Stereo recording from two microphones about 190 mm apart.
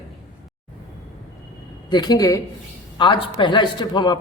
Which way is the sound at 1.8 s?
20° left (ahead or behind).